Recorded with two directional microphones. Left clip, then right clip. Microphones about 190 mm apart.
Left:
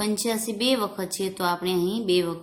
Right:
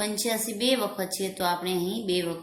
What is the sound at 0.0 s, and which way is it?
A woman's voice, 40° left (ahead or behind).